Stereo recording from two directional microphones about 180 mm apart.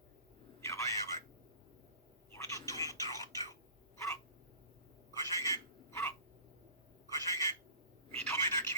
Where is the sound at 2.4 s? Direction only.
20° left (ahead or behind).